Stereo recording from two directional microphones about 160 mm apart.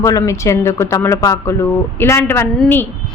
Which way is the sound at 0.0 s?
20° left (ahead or behind).